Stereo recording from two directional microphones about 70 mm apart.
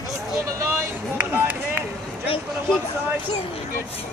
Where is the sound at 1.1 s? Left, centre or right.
Right.